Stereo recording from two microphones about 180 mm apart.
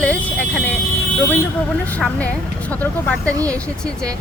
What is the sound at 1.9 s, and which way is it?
A woman's voice, 5° left (ahead or behind).